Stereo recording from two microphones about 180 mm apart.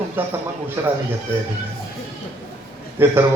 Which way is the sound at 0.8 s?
15° right (ahead or behind).